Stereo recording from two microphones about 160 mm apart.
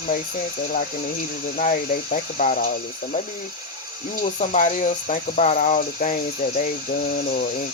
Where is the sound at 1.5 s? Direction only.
55° left (ahead or behind).